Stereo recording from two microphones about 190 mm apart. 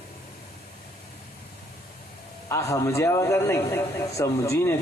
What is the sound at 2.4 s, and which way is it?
A man's voice, 15° left (ahead or behind).